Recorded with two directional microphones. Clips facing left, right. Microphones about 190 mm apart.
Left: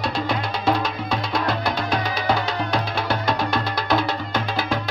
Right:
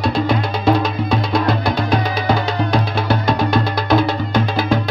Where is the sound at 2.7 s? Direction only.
10° right (ahead or behind).